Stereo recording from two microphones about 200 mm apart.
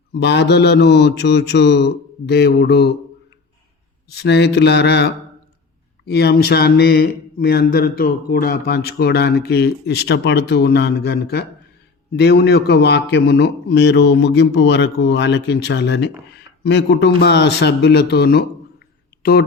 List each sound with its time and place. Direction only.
0.1 s a man's voice: 60° left (ahead or behind)
4.1 s a man's voice: 55° left (ahead or behind)